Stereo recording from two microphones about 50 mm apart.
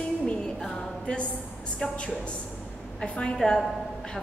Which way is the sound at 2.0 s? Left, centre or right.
Left.